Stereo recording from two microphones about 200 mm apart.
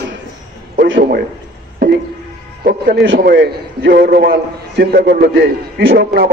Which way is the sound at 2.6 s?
55° right (ahead or behind).